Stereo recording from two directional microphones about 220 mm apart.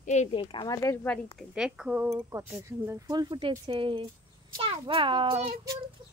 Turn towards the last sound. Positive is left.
turn(degrees=-25)  # may be behind; listen again after turning